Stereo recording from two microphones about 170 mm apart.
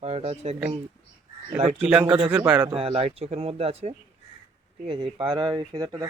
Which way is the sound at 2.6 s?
35° right (ahead or behind).